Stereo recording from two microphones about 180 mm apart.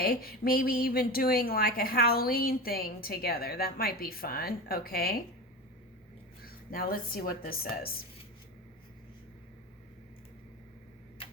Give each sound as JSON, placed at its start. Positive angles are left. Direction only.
{"t": 0.0, "sound": "a woman's voice", "side_deg": 55}
{"t": 6.4, "sound": "a woman's voice", "side_deg": 55}